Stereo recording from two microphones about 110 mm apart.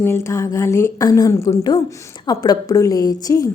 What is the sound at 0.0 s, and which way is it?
A woman's voice, 25° left (ahead or behind).